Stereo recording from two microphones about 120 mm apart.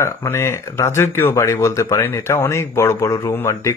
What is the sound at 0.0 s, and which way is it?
Speech, 20° left (ahead or behind).